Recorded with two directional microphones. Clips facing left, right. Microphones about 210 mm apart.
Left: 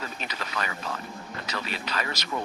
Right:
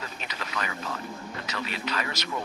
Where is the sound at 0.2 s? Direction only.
35° left (ahead or behind).